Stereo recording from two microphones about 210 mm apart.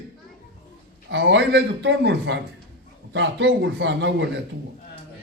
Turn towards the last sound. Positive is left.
turn(degrees=-60)  # may be behind; listen again after turning